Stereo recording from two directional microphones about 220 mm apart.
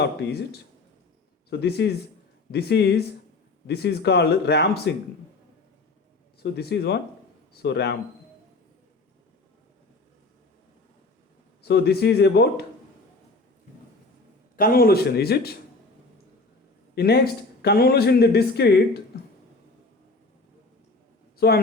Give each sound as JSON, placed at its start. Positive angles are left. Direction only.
{"t": 0.2, "sound": "speech", "side_deg": 50}
{"t": 1.5, "sound": "speech", "side_deg": 50}
{"t": 6.4, "sound": "speech", "side_deg": 50}
{"t": 11.7, "sound": "speech", "side_deg": 45}
{"t": 14.5, "sound": "speech", "side_deg": 40}
{"t": 16.9, "sound": "speech", "side_deg": 45}
{"t": 21.3, "sound": "a man's voice", "side_deg": 45}